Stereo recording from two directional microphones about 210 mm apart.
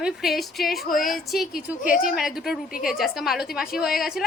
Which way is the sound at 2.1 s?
Centre (ahead or behind).